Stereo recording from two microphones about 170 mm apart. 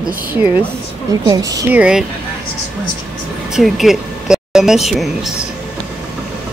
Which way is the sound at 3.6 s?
Centre (ahead or behind).